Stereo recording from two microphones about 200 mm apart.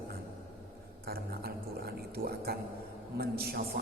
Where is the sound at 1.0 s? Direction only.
50° right (ahead or behind).